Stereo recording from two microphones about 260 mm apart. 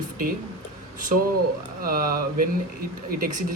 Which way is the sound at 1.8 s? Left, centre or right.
Right.